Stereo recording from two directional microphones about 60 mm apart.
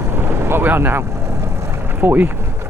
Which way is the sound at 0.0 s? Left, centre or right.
Right.